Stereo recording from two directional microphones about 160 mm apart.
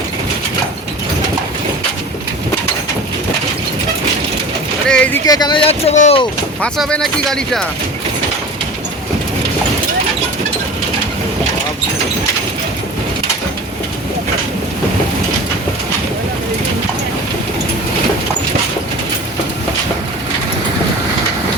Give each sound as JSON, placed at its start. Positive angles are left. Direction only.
{"t": 4.9, "sound": "a sound", "side_deg": 10}
{"t": 5.2, "sound": "speech", "side_deg": 25}
{"t": 6.6, "sound": "speech", "side_deg": 5}